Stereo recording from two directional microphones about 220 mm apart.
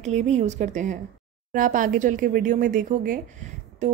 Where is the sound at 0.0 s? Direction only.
30° right (ahead or behind).